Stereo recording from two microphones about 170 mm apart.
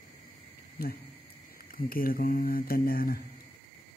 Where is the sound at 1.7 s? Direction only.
60° left (ahead or behind).